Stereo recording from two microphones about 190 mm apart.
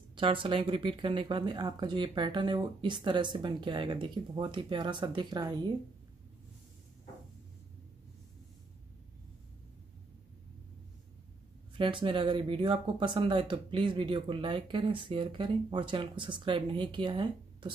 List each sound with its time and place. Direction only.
0.1 s speech: 25° right (ahead or behind)
11.7 s speech: 25° right (ahead or behind)